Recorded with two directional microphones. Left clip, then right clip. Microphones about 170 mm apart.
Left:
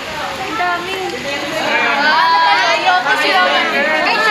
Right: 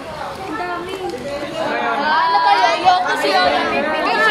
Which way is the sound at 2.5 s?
55° right (ahead or behind).